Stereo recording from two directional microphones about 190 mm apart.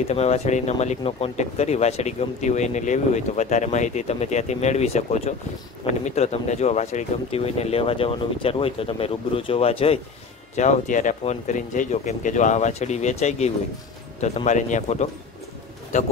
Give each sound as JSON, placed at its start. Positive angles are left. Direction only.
{"t": 0.1, "sound": "speech", "side_deg": 35}